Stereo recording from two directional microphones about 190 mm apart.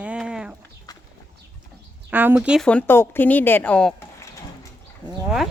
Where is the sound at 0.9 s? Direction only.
20° left (ahead or behind).